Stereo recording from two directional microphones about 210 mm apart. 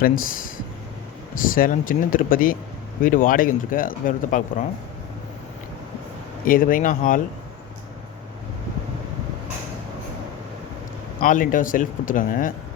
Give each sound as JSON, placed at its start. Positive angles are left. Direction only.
{"t": 1.5, "sound": "speech", "side_deg": 40}
{"t": 6.4, "sound": "speech", "side_deg": 40}
{"t": 11.2, "sound": "speech", "side_deg": 40}